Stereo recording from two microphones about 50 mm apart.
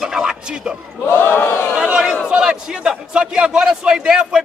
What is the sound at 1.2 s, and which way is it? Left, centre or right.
Speech, left.